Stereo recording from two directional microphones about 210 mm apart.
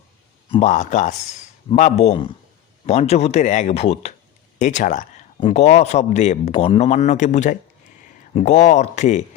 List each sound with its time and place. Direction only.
0.5 s speech: 35° left (ahead or behind)